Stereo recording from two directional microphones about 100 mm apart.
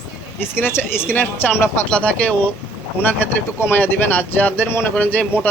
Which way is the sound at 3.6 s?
20° left (ahead or behind).